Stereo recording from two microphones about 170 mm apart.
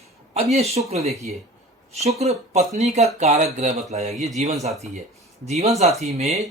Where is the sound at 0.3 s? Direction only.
40° right (ahead or behind).